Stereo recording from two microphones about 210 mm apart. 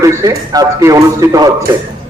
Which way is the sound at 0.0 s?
15° right (ahead or behind).